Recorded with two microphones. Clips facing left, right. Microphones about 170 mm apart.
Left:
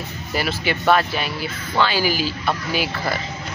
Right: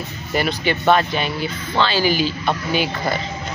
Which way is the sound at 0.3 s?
5° left (ahead or behind).